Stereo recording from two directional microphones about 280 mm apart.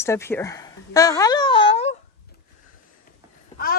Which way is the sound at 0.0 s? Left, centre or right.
Centre.